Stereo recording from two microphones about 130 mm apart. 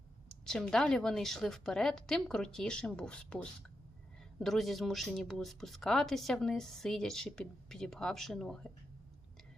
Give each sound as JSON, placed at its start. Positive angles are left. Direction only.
{"t": 0.3, "sound": "speech", "side_deg": 5}